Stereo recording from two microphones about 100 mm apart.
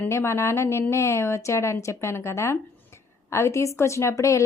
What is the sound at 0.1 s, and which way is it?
A woman's voice, 25° left (ahead or behind).